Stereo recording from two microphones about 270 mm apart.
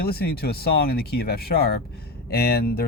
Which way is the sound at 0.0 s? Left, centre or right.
Left.